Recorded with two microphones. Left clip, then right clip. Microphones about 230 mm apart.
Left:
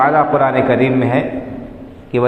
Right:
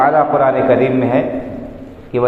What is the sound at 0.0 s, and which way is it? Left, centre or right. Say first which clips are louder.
A man's voice: right 1 dB; left.